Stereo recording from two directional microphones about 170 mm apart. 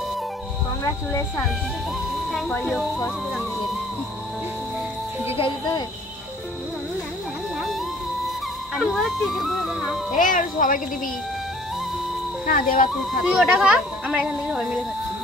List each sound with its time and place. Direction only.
2.6 s speech: centre (ahead or behind)
8.7 s speech: centre (ahead or behind)
10.1 s speech: 50° left (ahead or behind)
12.4 s speech: 55° left (ahead or behind)
13.2 s speech: 5° right (ahead or behind)